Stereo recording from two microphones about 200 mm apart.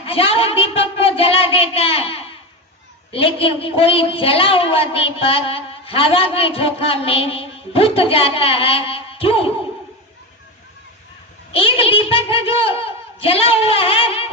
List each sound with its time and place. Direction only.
0.0 s a woman's voice: 30° left (ahead or behind)
11.5 s a woman's voice: 30° left (ahead or behind)